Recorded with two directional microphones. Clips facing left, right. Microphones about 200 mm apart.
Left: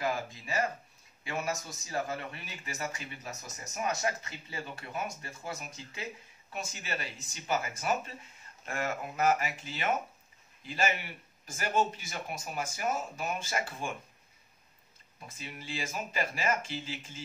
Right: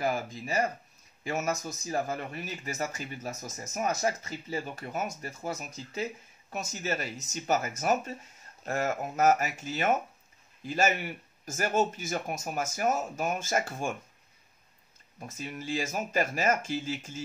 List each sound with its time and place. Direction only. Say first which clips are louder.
1.3 s speech: right 4 dB; 45° right (ahead or behind)
15.1 s speech: right 7 dB; 45° right (ahead or behind)